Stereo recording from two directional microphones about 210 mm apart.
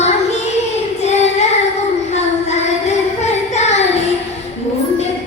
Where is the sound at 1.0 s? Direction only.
30° left (ahead or behind).